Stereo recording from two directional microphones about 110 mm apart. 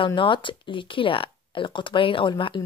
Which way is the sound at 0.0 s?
50° left (ahead or behind).